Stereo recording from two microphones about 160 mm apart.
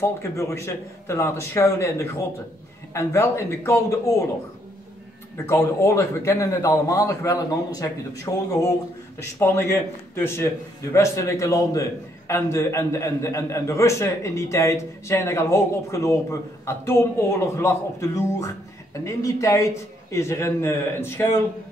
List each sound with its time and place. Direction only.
0.0 s a man's voice: 15° left (ahead or behind)
5.5 s a man's voice: 20° left (ahead or behind)